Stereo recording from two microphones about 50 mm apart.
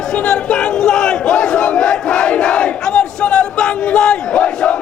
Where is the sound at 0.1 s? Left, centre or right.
Centre.